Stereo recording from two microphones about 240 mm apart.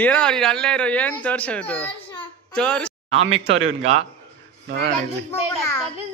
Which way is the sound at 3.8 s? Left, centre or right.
Right.